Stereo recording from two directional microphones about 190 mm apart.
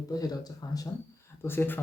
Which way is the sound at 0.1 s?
20° left (ahead or behind).